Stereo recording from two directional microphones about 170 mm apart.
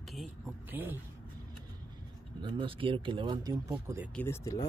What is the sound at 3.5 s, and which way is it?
Speech, 15° right (ahead or behind).